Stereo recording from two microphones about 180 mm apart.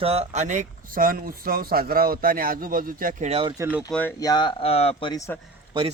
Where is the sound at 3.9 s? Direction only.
10° left (ahead or behind).